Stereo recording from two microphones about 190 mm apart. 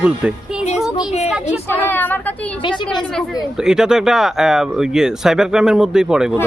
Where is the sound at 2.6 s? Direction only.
25° left (ahead or behind).